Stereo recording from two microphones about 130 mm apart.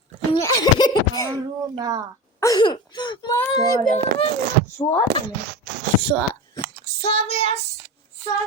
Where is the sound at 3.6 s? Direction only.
30° left (ahead or behind).